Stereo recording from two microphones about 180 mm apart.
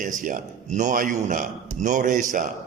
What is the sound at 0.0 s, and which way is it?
A man's voice, 45° right (ahead or behind).